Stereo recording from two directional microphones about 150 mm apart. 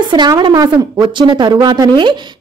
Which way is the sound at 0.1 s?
30° right (ahead or behind).